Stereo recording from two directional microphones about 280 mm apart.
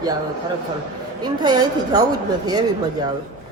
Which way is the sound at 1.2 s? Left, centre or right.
Centre.